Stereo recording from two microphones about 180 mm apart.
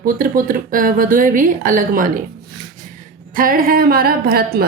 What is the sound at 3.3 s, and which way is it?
A woman's voice, 50° right (ahead or behind).